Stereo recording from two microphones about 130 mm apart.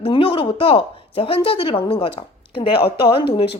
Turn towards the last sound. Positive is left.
turn(degrees=45)  # may be behind; listen again after turning